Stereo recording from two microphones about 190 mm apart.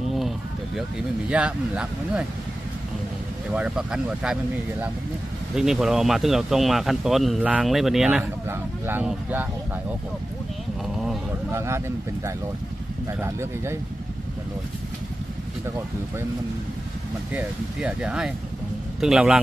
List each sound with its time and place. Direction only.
1.3 s speech: 5° right (ahead or behind)
3.5 s speech: 5° right (ahead or behind)
11.5 s speech: 15° right (ahead or behind)
13.2 s speech: 15° right (ahead or behind)
17.3 s speech: 5° right (ahead or behind)